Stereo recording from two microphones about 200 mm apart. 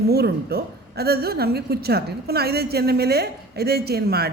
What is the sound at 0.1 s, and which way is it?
A woman's voice, 50° right (ahead or behind).